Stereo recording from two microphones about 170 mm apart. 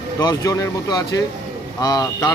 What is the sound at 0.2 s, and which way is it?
Speech, 20° left (ahead or behind).